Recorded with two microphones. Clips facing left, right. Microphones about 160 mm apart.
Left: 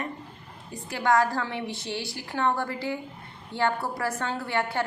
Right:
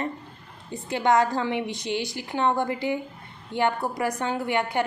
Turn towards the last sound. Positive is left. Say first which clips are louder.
# right 3 dB
turn(degrees=-15)  # may be behind; listen again after turning